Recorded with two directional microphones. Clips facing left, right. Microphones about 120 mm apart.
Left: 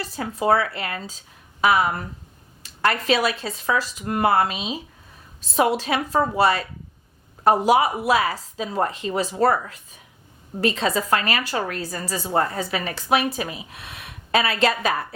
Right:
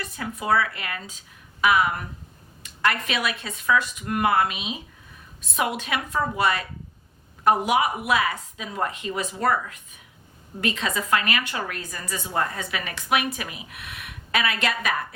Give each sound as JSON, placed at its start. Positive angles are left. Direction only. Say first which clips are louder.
{"t": 0.0, "sound": "a woman's voice", "louder": "left 6 dB", "side_deg": 30}